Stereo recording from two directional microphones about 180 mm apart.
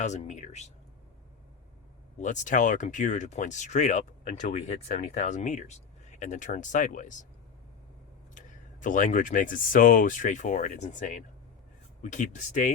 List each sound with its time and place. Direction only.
0.0 s speech: 40° left (ahead or behind)
2.1 s speech: 45° left (ahead or behind)
8.4 s speech: 45° left (ahead or behind)